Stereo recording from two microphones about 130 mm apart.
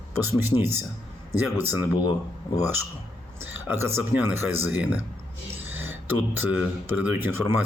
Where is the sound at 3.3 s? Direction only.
15° right (ahead or behind).